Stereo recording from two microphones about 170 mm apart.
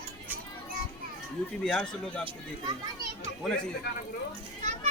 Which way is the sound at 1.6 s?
5° left (ahead or behind).